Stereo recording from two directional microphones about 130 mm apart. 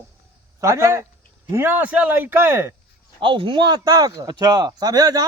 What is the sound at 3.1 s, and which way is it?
A man's voice, 40° right (ahead or behind).